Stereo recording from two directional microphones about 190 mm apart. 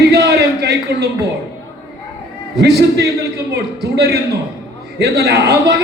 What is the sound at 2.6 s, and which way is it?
A man's voice, 60° right (ahead or behind).